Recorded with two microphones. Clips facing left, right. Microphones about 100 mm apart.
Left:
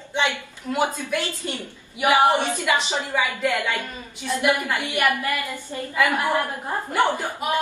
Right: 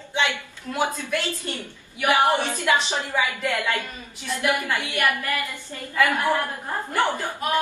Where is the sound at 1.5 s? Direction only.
20° left (ahead or behind).